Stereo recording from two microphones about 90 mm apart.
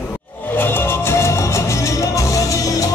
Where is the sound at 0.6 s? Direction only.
25° left (ahead or behind).